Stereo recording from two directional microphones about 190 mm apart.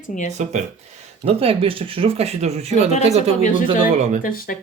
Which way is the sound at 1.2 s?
30° right (ahead or behind).